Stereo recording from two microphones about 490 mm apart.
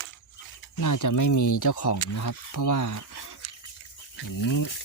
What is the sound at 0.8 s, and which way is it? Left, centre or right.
Speech, left.